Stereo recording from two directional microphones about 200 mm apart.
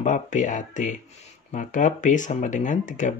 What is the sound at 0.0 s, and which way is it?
Speech, 40° left (ahead or behind).